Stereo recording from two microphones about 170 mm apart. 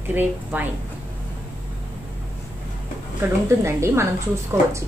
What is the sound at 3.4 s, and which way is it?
Speech, 15° right (ahead or behind).